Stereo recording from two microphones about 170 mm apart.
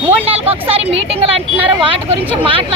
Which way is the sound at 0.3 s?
35° right (ahead or behind).